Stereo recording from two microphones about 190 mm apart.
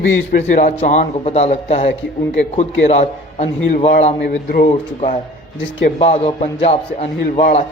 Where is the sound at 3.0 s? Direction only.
35° left (ahead or behind).